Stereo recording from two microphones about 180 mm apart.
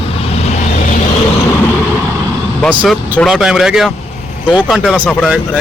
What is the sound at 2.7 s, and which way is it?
Speech, 10° right (ahead or behind).